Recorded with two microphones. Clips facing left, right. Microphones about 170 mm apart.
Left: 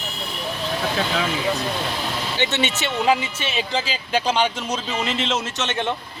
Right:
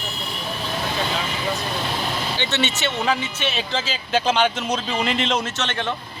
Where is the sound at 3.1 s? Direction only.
5° left (ahead or behind).